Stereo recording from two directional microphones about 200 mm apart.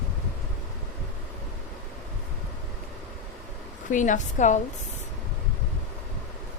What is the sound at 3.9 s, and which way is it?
Speech, 40° left (ahead or behind).